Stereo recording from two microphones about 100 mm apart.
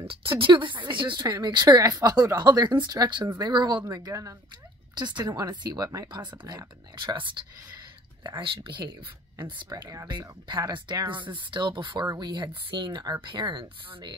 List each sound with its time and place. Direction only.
0.0 s speech: 60° right (ahead or behind)
1.2 s speech: 45° right (ahead or behind)
4.9 s speech: 45° right (ahead or behind)